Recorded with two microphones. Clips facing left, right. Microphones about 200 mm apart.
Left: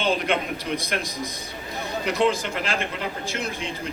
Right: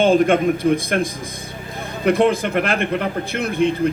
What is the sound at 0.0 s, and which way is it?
A man's voice, 50° right (ahead or behind).